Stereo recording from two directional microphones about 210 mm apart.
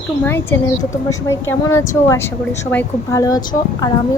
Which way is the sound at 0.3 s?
10° left (ahead or behind).